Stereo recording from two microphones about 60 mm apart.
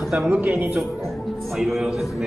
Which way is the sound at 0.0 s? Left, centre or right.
Centre.